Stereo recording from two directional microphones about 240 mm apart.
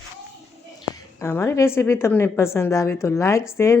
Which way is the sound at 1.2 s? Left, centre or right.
Centre.